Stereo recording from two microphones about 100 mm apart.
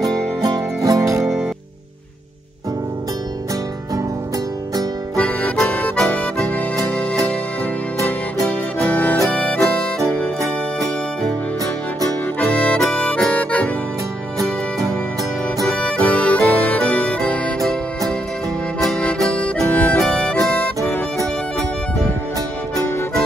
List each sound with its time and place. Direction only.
0.4 s music: 40° right (ahead or behind)
5.1 s music: 10° left (ahead or behind)
5.9 s accordion: 5° left (ahead or behind)
9.2 s music: 5° left (ahead or behind)
12.4 s accordion: 10° left (ahead or behind)
15.6 s music: 10° left (ahead or behind)